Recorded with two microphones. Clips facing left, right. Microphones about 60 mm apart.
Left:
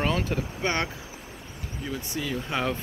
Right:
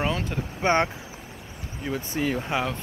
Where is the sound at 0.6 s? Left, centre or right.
Right.